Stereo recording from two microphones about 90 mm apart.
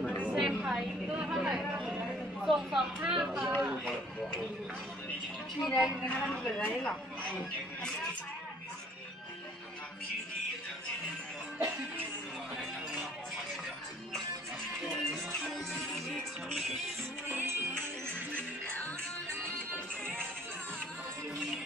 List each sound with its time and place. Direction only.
0.2 s a sound: 10° right (ahead or behind)
2.4 s speech: 5° right (ahead or behind)
3.6 s a sound: 15° right (ahead or behind)
5.7 s speech: 5° right (ahead or behind)
6.0 s speech: 15° left (ahead or behind)
15.5 s music: 5° left (ahead or behind)
17.3 s music: 25° right (ahead or behind)
18.3 s music: 15° left (ahead or behind)